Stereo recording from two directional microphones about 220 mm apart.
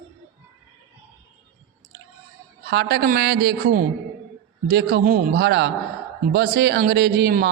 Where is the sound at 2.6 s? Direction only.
50° right (ahead or behind).